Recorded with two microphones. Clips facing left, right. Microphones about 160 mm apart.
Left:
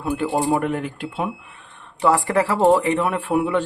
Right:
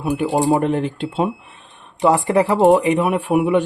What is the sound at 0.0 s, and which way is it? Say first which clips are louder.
Speech: right 3 dB; 15° right (ahead or behind).